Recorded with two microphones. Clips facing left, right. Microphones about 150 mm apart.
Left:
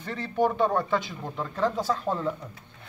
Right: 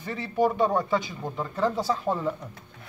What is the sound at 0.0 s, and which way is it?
Chopping, 5° right (ahead or behind).